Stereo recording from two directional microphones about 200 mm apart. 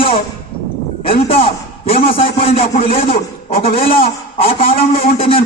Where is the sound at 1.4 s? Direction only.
30° left (ahead or behind).